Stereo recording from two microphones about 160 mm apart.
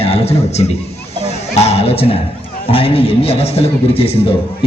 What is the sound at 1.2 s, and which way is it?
Music, 45° left (ahead or behind).